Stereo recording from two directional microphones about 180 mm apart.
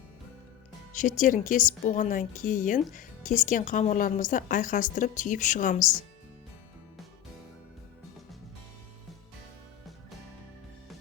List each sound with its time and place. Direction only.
0.9 s speech: 45° left (ahead or behind)